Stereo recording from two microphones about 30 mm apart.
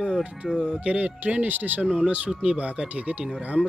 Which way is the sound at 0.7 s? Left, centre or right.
Right.